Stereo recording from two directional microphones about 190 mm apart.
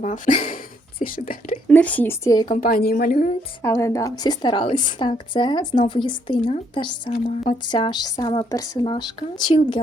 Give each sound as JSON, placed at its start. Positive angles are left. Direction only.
{"t": 0.0, "sound": "speech", "side_deg": 40}
{"t": 1.6, "sound": "speech", "side_deg": 5}
{"t": 2.5, "sound": "a woman's voice", "side_deg": 50}
{"t": 3.6, "sound": "speech", "side_deg": 15}